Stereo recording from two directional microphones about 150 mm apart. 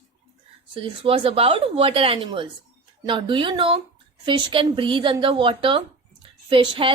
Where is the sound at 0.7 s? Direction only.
35° right (ahead or behind).